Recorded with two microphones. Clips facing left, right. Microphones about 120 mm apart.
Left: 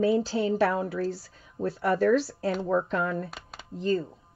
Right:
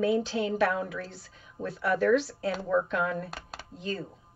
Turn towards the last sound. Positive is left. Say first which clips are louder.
# left 8 dB
turn(degrees=40)  # may be behind; listen again after turning